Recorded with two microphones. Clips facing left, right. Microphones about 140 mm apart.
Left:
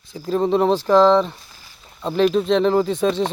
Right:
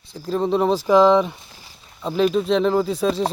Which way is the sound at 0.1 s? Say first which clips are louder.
Left 2 dB; centre (ahead or behind).